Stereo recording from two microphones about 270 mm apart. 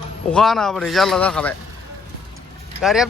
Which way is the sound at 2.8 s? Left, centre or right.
Centre.